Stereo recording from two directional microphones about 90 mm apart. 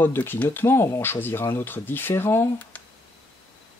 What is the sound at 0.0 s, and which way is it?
Speech, 25° left (ahead or behind).